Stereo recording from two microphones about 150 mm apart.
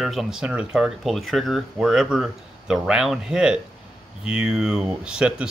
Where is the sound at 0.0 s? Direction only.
Centre (ahead or behind).